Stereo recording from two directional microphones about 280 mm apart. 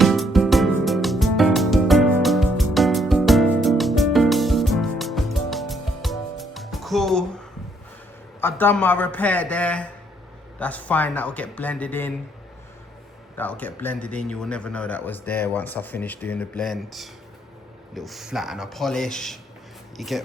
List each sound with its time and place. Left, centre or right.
0.0 s music: centre
8.4 s a man's voice: centre
13.3 s a man's voice: centre